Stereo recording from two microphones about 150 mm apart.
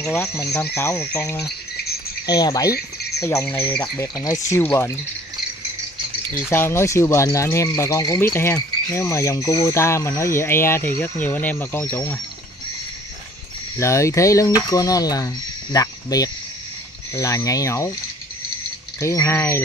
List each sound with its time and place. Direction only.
0.1 s speech: 20° left (ahead or behind)
2.2 s speech: 25° left (ahead or behind)
2.7 s cricket: 90° left
3.2 s speech: 20° left (ahead or behind)
4.0 s speech: 20° left (ahead or behind)
6.3 s speech: 15° left (ahead or behind)
13.7 s speech: 20° left (ahead or behind)
18.9 s speech: 20° left (ahead or behind)